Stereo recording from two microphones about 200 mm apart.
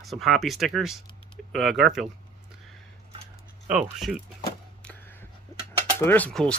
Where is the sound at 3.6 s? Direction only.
40° right (ahead or behind).